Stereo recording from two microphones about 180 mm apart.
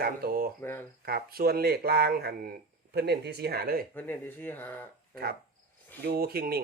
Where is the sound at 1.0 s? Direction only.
55° right (ahead or behind).